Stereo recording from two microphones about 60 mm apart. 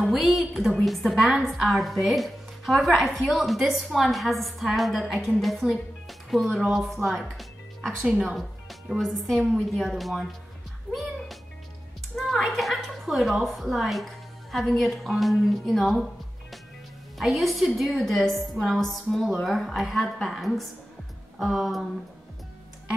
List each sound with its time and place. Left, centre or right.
0.0 s a woman's voice: centre
7.2 s music: centre
8.0 s speech: centre
9.0 s a woman's voice: centre
10.9 s speech: right
12.2 s a woman's voice: centre
17.2 s a woman's voice: centre